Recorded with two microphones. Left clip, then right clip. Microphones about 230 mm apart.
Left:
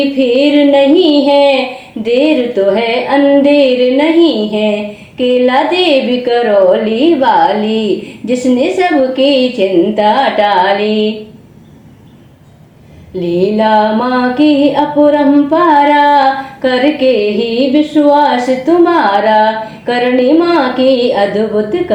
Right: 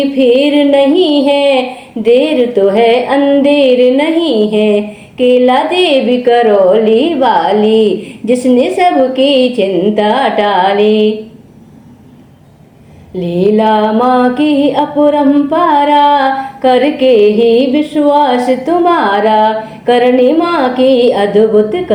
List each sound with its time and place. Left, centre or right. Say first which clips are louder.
0.2 s music: right 1 dB; right
13.1 s music: right 1 dB; right